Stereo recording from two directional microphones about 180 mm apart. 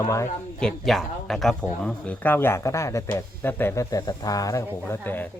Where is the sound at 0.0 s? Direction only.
15° left (ahead or behind).